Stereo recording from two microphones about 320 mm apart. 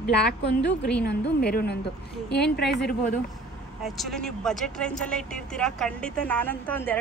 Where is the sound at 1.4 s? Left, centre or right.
Left.